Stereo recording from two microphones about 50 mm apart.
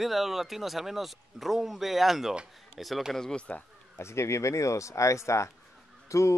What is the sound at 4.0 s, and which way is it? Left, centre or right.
Speech, left.